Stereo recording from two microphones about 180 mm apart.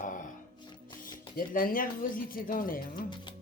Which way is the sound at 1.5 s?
50° left (ahead or behind).